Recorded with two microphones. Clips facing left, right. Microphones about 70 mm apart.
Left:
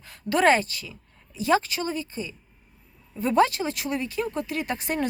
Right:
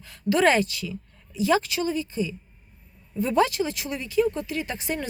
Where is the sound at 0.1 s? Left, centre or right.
Left.